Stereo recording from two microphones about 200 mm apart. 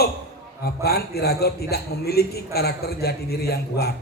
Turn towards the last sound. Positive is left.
turn(degrees=50)  # may be behind; listen again after turning